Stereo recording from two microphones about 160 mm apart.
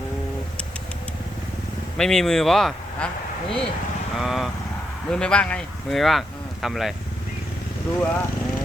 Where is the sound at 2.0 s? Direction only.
5° left (ahead or behind).